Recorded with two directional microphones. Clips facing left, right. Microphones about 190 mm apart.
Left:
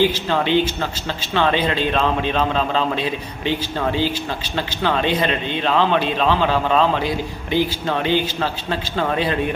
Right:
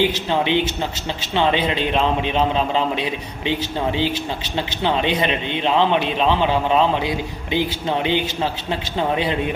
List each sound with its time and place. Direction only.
0.0 s speech: 20° right (ahead or behind)